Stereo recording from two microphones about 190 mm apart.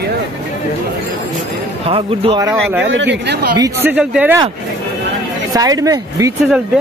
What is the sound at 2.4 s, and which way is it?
Speech, 10° right (ahead or behind).